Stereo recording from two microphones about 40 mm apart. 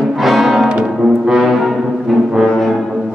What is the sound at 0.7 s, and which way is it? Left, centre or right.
Brass instrument, centre.